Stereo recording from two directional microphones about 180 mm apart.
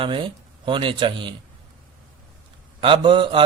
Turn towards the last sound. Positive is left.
turn(degrees=-30)  # may be behind; listen again after turning